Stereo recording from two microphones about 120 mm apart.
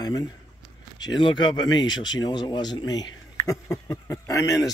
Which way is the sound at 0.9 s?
35° left (ahead or behind).